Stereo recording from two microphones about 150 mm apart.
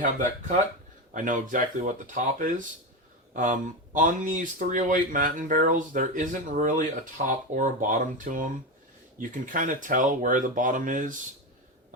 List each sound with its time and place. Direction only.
0.0 s speech: 60° right (ahead or behind)